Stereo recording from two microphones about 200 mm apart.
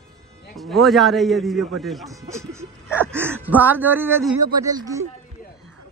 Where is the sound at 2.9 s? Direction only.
10° left (ahead or behind).